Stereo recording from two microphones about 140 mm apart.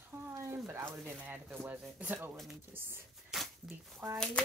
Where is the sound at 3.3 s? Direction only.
5° right (ahead or behind).